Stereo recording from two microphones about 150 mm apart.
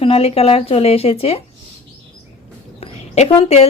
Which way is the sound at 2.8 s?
45° left (ahead or behind).